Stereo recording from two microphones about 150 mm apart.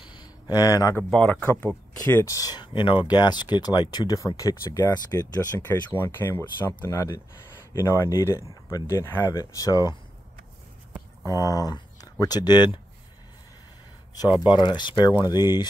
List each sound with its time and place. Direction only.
0.0 s a sound: 30° left (ahead or behind)
1.1 s speech: 10° left (ahead or behind)
11.2 s speech: 25° left (ahead or behind)
14.4 s speech: 30° left (ahead or behind)